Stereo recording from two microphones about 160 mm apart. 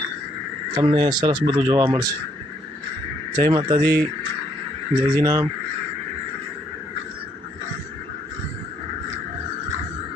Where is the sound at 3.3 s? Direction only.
25° right (ahead or behind).